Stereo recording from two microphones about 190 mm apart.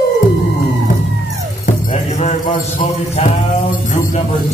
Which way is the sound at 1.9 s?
35° left (ahead or behind).